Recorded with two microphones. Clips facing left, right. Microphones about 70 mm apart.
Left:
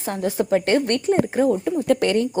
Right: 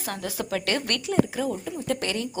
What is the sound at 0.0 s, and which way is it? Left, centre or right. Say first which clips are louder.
A woman's voice: left 8 dB; left.